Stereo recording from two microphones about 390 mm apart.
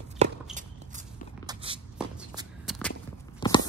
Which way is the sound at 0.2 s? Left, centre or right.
Centre.